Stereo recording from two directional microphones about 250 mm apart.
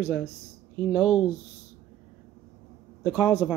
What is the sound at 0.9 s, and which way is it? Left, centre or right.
Speech, centre.